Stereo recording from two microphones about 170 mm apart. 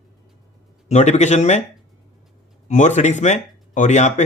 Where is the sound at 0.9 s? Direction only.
40° left (ahead or behind).